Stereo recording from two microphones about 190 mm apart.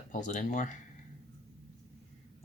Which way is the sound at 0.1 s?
40° left (ahead or behind).